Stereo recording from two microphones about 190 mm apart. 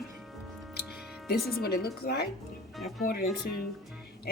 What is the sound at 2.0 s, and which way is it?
Speech, 45° left (ahead or behind).